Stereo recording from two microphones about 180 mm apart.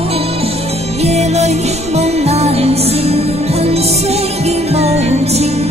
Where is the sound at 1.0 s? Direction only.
35° right (ahead or behind).